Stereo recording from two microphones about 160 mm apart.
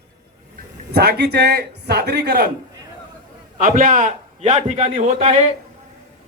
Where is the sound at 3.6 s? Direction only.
55° right (ahead or behind).